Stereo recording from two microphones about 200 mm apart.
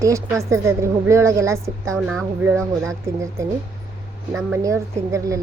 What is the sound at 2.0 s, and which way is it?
Speech, centre (ahead or behind).